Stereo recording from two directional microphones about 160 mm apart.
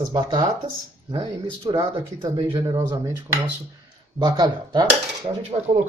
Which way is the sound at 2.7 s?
20° right (ahead or behind).